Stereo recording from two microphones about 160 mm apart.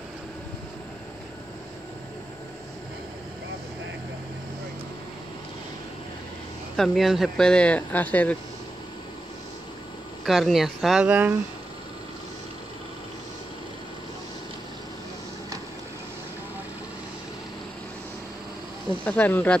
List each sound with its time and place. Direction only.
6.8 s speech: centre (ahead or behind)
10.2 s speech: centre (ahead or behind)
19.0 s speech: 10° left (ahead or behind)